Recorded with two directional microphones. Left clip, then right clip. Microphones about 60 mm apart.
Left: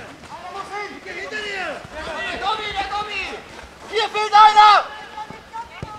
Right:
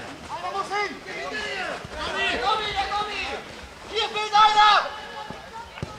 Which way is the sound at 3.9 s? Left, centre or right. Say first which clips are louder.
Left 6 dB; left.